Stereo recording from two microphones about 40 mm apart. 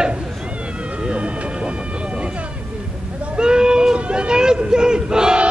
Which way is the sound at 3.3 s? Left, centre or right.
Right.